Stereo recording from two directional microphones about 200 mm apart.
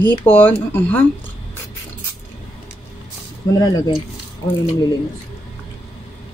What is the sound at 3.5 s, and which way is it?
Speech, 20° left (ahead or behind).